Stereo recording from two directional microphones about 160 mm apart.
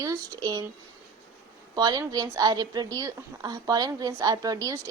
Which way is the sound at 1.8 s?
25° right (ahead or behind).